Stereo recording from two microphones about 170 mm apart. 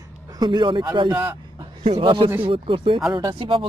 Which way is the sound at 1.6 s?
30° right (ahead or behind).